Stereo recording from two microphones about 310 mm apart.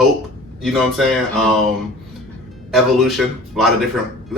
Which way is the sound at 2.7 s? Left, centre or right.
Centre.